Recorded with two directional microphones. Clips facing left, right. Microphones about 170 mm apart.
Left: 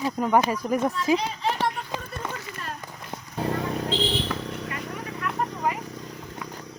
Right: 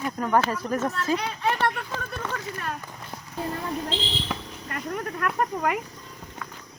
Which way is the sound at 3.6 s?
65° left (ahead or behind).